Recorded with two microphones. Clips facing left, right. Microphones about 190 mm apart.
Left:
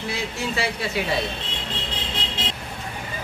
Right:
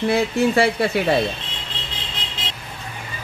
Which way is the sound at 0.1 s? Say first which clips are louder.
Right 10 dB; 55° right (ahead or behind).